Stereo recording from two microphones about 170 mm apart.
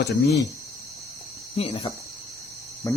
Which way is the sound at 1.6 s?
35° left (ahead or behind).